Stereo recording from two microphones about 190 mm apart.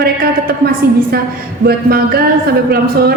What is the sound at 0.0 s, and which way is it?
A woman's voice, 55° right (ahead or behind).